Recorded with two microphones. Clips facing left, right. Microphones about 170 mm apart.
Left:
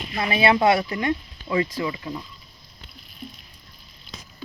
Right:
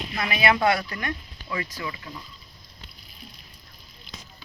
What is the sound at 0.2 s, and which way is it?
Speech, 30° left (ahead or behind).